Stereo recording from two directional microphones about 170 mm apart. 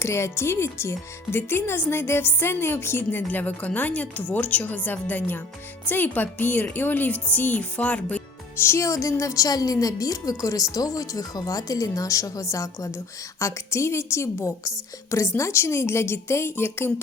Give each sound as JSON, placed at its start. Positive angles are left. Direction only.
{"t": 0.0, "sound": "speech", "side_deg": 15}